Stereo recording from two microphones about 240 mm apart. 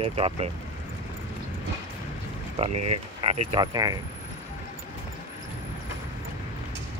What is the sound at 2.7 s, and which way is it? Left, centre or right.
Speech, right.